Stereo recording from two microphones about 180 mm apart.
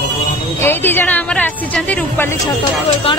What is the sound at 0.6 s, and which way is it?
A woman's voice, 10° left (ahead or behind).